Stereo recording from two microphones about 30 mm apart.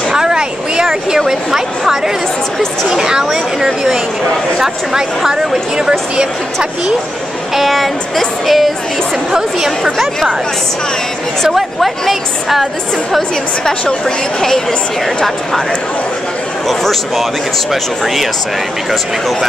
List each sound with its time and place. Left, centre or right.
0.1 s a sound: right
1.1 s a woman's voice: centre
5.8 s speech: right
7.5 s speech: centre
11.5 s speech: centre
13.7 s a woman's voice: left
16.6 s speech: centre